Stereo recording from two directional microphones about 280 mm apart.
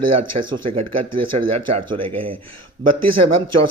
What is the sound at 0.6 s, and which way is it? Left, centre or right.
Speech, centre.